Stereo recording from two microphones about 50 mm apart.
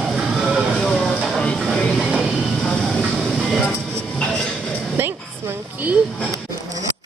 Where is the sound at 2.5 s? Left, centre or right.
Centre.